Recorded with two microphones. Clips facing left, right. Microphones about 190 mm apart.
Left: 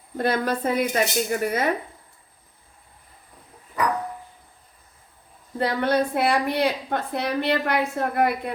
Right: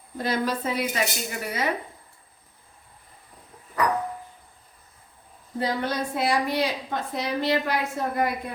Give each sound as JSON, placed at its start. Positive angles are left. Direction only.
{"t": 0.2, "sound": "speech", "side_deg": 55}
{"t": 5.5, "sound": "a woman's voice", "side_deg": 60}